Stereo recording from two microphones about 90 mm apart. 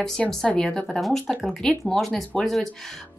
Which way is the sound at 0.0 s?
5° left (ahead or behind).